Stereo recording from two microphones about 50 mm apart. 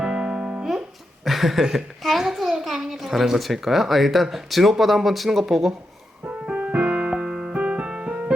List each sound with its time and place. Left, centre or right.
0.0 s music: centre
1.2 s a child's voice: centre
6.4 s keyboard: centre
7.5 s music: right